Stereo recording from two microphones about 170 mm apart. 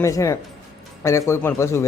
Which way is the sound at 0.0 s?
15° left (ahead or behind).